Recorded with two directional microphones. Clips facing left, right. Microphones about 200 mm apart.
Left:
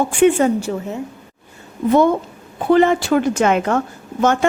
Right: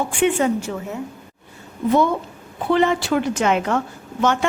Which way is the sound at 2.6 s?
50° left (ahead or behind).